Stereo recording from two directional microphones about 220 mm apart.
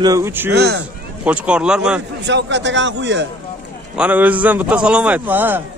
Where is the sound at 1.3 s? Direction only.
5° right (ahead or behind).